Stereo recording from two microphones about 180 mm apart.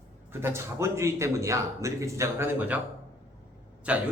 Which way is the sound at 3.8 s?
5° right (ahead or behind).